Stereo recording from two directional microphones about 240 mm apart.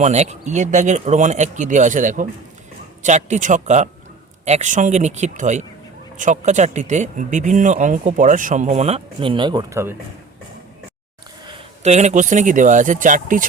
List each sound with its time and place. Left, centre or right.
0.0 s speech: right
11.4 s speech: right